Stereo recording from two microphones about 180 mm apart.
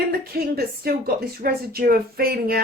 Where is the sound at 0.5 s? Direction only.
60° right (ahead or behind).